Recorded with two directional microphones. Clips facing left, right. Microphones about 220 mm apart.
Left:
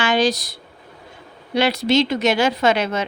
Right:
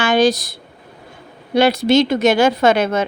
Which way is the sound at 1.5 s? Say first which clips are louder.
Right 4 dB; 50° right (ahead or behind).